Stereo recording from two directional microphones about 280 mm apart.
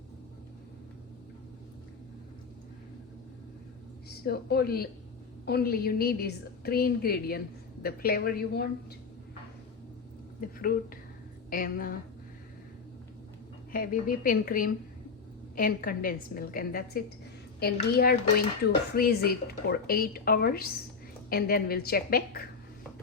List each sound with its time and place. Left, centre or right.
4.3 s a woman's voice: left
10.4 s a woman's voice: left
13.7 s a woman's voice: left